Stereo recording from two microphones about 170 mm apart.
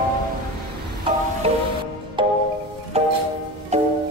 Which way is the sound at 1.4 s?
35° right (ahead or behind).